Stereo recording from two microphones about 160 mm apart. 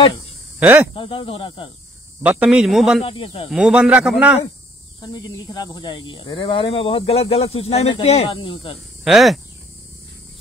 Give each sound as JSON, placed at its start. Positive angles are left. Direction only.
{"t": 0.6, "sound": "speech", "side_deg": -10}
{"t": 0.9, "sound": "speech", "side_deg": 35}
{"t": 2.2, "sound": "speech", "side_deg": -5}
{"t": 3.0, "sound": "speech", "side_deg": 35}
{"t": 3.4, "sound": "speech", "side_deg": -5}
{"t": 5.0, "sound": "speech", "side_deg": 25}
{"t": 8.7, "sound": "speech", "side_deg": 0}